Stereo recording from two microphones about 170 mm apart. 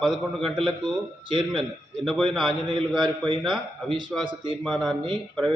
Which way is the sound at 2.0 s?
Centre (ahead or behind).